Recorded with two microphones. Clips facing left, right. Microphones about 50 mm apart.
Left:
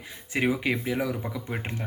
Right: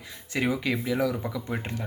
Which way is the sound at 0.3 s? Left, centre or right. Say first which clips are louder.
Left 1 dB; left.